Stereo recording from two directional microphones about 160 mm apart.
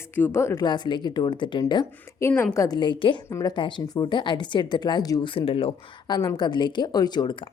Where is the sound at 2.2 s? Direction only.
15° left (ahead or behind).